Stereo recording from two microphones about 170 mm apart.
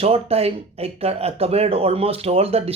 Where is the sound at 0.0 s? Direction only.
35° right (ahead or behind).